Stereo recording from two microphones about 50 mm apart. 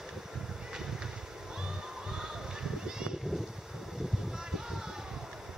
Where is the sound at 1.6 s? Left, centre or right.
Centre.